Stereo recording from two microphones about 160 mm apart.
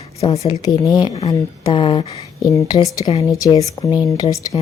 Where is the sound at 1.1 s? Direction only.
40° left (ahead or behind); by 4.3 s 20° left (ahead or behind).